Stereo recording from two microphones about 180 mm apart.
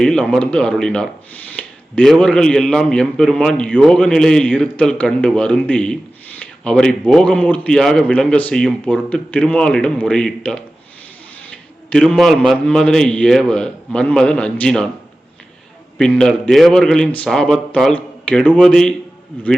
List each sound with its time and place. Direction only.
0.0 s speech: 5° left (ahead or behind)
11.9 s speech: 5° left (ahead or behind)
16.0 s speech: 5° left (ahead or behind)